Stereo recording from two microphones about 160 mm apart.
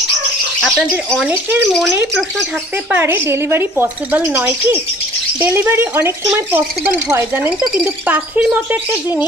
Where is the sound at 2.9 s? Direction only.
15° right (ahead or behind).